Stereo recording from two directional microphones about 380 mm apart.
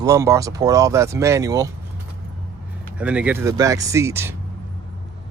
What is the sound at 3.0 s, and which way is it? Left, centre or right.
Speech, centre.